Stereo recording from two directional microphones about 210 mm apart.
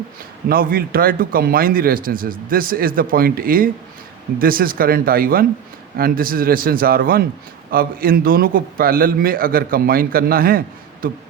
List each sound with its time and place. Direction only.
0.4 s a man's voice: 45° right (ahead or behind)